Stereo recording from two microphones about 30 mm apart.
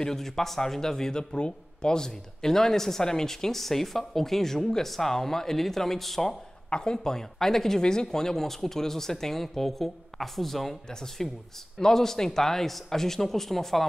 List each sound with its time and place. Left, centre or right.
0.0 s speech: centre
6.7 s speech: left
7.8 s speech: left; by 13.8 s centre